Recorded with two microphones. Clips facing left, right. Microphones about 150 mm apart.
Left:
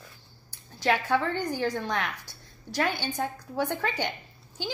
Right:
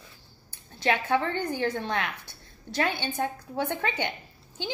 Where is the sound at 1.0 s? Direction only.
20° right (ahead or behind).